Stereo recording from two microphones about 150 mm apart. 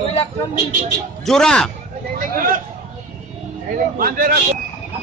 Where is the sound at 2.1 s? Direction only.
65° right (ahead or behind).